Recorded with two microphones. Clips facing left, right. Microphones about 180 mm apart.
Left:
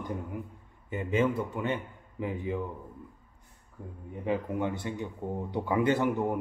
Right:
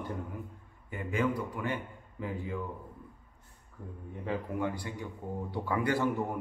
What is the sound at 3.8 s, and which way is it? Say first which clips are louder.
A man's voice: left 3 dB; 15° left (ahead or behind).